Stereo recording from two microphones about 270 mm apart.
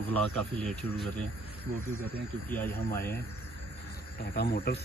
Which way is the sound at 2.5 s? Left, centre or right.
Centre.